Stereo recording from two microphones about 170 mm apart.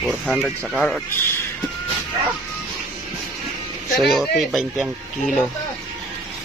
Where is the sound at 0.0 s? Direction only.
5° right (ahead or behind).